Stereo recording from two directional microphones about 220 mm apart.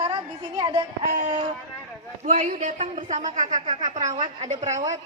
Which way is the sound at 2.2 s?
35° right (ahead or behind).